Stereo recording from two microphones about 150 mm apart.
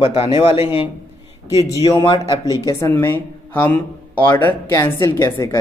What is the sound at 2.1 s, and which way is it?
A man's voice, 25° left (ahead or behind).